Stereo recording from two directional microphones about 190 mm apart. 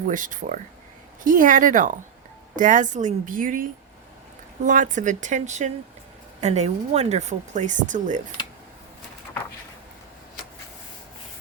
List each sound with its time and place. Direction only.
0.1 s a woman's voice: 45° right (ahead or behind)